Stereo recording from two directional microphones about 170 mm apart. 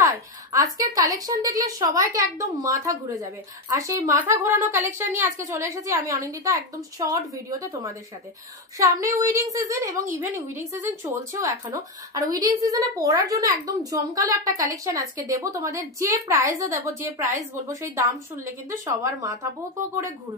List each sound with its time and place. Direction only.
0.0 s a woman's voice: 20° right (ahead or behind)